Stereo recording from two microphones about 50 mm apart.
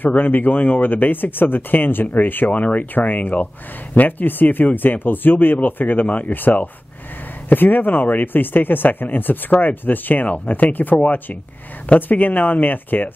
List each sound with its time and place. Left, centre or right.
0.0 s speech: left
2.5 s speech: left